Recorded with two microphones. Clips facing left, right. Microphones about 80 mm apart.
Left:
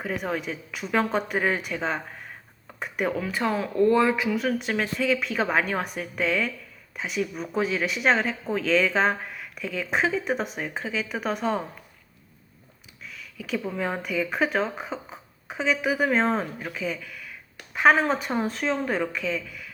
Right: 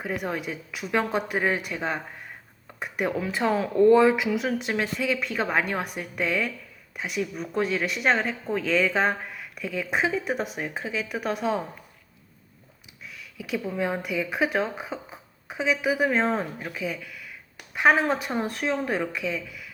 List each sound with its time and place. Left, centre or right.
0.0 s speech: centre
3.2 s speech: right
4.5 s speech: centre
13.0 s a sound: centre
13.6 s speech: centre